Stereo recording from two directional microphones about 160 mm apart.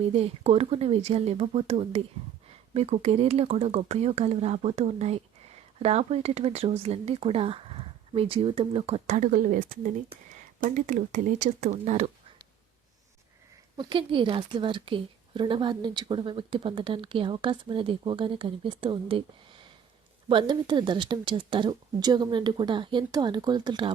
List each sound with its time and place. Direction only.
0.1 s speech: 40° right (ahead or behind)
13.7 s speech: 30° right (ahead or behind)
20.2 s speech: 30° right (ahead or behind)